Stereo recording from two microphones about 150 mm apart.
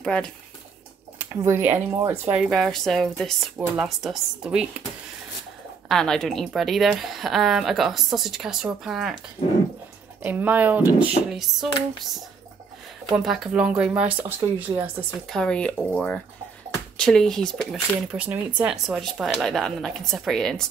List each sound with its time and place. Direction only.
0.0 s speech: 5° left (ahead or behind)
1.1 s speech: 15° right (ahead or behind)
2.3 s a woman's voice: centre (ahead or behind)
5.9 s a woman's voice: 5° left (ahead or behind)
10.2 s speech: 10° right (ahead or behind)
13.1 s speech: centre (ahead or behind)
14.4 s speech: 30° right (ahead or behind)
15.2 s a woman's voice: 5° left (ahead or behind)